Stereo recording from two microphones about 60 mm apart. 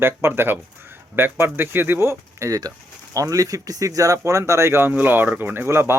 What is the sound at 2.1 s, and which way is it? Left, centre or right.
Speech, right.